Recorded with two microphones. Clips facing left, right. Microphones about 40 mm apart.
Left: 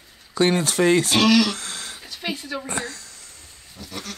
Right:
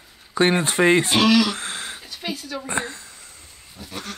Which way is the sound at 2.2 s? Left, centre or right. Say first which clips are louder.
Left 1 dB; centre.